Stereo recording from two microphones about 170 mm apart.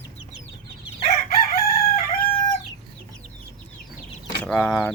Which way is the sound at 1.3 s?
65° left (ahead or behind).